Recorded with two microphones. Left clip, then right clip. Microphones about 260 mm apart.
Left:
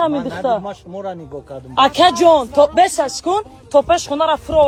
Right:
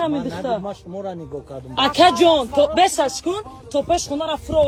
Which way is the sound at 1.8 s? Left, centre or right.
Centre.